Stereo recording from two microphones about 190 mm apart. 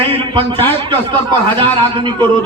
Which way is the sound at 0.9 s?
25° right (ahead or behind).